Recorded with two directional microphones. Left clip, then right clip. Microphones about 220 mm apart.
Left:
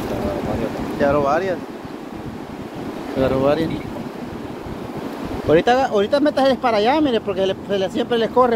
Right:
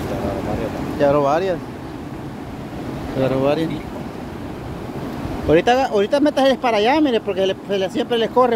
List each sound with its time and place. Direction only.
1.0 s speech: 20° right (ahead or behind)
3.2 s speech: 10° right (ahead or behind)
5.5 s speech: 15° right (ahead or behind)